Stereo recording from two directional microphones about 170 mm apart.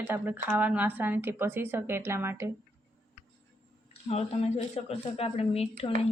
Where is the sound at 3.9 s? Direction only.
35° left (ahead or behind).